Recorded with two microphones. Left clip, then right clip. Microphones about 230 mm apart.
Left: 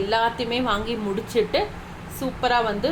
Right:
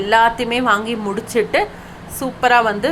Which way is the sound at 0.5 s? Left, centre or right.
Centre.